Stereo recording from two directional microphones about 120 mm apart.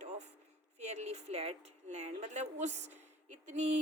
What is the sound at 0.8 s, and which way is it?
A woman's voice, 65° right (ahead or behind).